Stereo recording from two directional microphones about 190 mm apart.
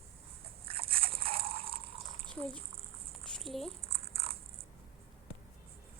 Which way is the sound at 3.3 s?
Centre (ahead or behind).